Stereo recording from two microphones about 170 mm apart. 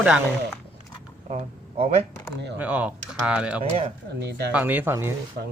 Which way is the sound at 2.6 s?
10° right (ahead or behind).